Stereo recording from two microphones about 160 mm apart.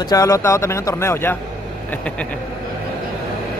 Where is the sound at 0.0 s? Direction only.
25° left (ahead or behind); by 2.2 s 5° left (ahead or behind).